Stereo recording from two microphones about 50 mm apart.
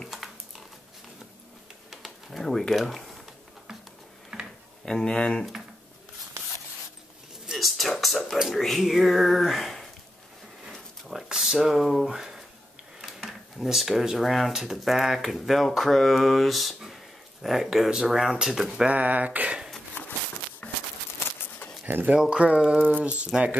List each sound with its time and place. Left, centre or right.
1.9 s pigeon: centre
2.7 s speech: centre
4.3 s tick-tock: centre
4.8 s speech: centre
7.5 s a sound: centre
8.5 s mantra: centre
11.2 s speech: centre
13.0 s a sound: centre
14.5 s mantra: centre
18.0 s speech: centre
18.9 s a sound: right
20.6 s a sound: left
22.1 s speech: centre